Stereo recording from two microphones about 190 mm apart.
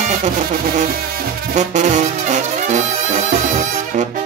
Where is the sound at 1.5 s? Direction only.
40° right (ahead or behind).